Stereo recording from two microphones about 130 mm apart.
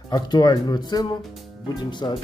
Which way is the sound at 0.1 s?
30° left (ahead or behind).